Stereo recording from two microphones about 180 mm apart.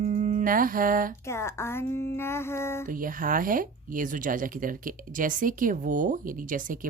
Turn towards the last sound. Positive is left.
turn(degrees=-50)  # may be behind; listen again after turning